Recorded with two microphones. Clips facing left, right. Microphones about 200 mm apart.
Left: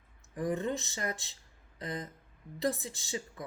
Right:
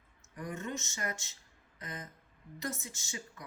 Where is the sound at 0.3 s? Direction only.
35° left (ahead or behind).